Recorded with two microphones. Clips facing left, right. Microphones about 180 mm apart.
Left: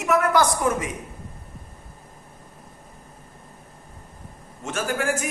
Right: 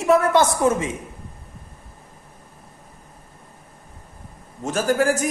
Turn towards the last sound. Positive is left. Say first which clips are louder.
# right 6 dB
turn(degrees=-40)  # may be behind; listen again after turning